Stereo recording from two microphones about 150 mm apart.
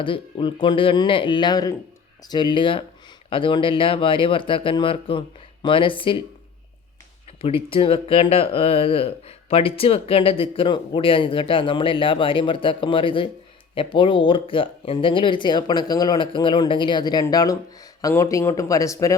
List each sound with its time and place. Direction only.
0.0 s speech: 35° left (ahead or behind)
7.4 s speech: 40° left (ahead or behind); by 19.1 s 20° left (ahead or behind)